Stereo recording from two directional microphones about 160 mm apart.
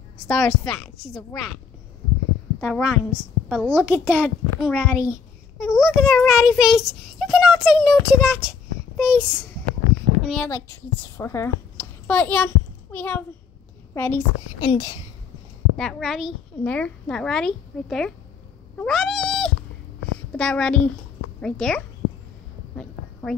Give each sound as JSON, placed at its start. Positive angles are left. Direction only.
{"t": 0.3, "sound": "a child's voice", "side_deg": 0}
{"t": 2.6, "sound": "a woman's voice", "side_deg": 0}
{"t": 4.8, "sound": "a child's voice", "side_deg": 20}
{"t": 5.6, "sound": "a child's voice", "side_deg": -5}
{"t": 10.2, "sound": "a child's voice", "side_deg": 5}
{"t": 14.6, "sound": "a child's voice", "side_deg": 25}
{"t": 15.7, "sound": "a child's voice", "side_deg": 5}
{"t": 18.8, "sound": "cat", "side_deg": 5}
{"t": 20.3, "sound": "a child's voice", "side_deg": 5}